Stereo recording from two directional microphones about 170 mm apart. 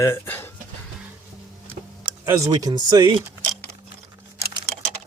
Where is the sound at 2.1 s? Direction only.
15° right (ahead or behind).